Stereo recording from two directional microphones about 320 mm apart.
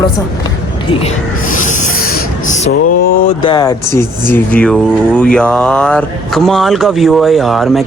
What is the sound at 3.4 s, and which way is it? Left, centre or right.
Speech, centre.